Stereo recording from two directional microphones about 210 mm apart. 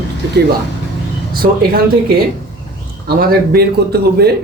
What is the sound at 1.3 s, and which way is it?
A man's voice, 45° right (ahead or behind).